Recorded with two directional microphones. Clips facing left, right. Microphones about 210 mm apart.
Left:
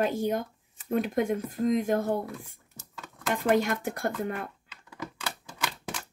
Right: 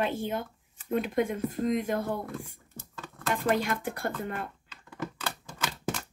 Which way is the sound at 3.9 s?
45° left (ahead or behind).